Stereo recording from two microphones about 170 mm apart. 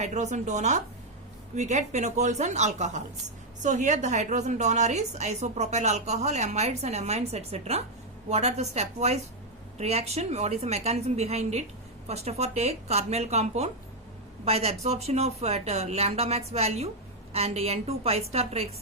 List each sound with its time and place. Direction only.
0.0 s a woman's voice: 45° right (ahead or behind)